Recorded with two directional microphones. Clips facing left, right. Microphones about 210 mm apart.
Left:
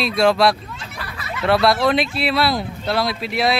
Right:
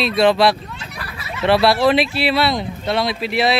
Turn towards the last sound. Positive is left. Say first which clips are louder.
# right 2 dB
turn(degrees=0)  # may be behind; listen again after turning